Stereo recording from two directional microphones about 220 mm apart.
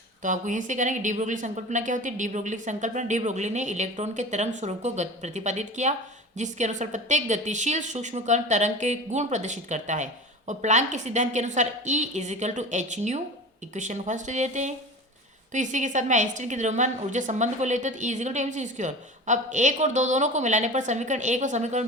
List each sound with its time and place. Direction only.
0.2 s a woman's voice: 35° right (ahead or behind)